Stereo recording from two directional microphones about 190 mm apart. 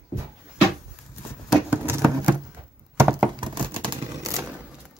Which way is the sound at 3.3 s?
25° right (ahead or behind).